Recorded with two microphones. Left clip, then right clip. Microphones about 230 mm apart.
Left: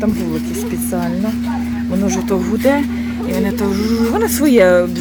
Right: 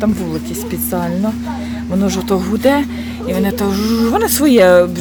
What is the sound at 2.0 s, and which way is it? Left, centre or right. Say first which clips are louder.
Speech: right 1 dB; right.